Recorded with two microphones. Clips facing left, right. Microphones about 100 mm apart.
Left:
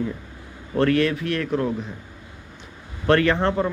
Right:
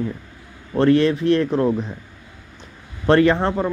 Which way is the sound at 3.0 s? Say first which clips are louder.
Right 3 dB; 20° right (ahead or behind).